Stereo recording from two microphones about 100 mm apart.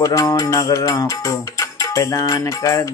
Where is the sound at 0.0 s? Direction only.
35° left (ahead or behind).